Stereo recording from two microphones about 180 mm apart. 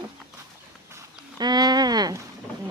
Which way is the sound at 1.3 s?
25° right (ahead or behind).